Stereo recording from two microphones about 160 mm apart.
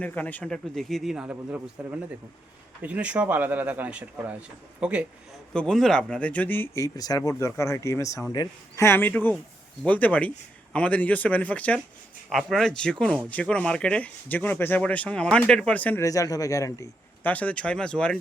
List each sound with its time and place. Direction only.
0.0 s speech: 10° left (ahead or behind); by 5.0 s 5° right (ahead or behind)
5.5 s speech: 5° left (ahead or behind)
16.0 s speech: 20° left (ahead or behind); by 18.2 s 5° left (ahead or behind)